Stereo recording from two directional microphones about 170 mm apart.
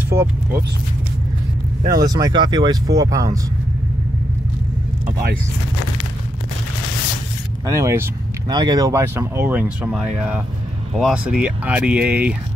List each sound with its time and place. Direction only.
0.1 s speech: 15° right (ahead or behind)
2.0 s speech: 20° right (ahead or behind)
7.6 s speech: 15° right (ahead or behind)